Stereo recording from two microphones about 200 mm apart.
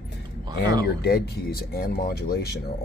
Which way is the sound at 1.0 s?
50° left (ahead or behind).